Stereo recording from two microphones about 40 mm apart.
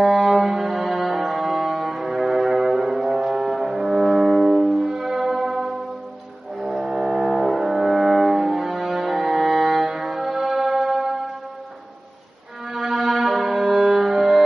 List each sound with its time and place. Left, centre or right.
0.0 s music: centre
7.5 s french horn: centre
8.5 s music: centre
12.7 s music: centre